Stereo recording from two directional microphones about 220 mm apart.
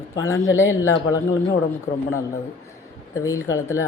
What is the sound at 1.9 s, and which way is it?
Speech, 45° left (ahead or behind).